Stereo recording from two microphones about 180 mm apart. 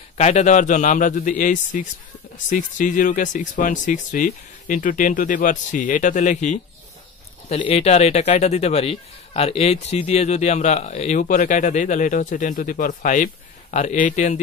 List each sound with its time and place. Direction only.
0.2 s speech: 40° left (ahead or behind)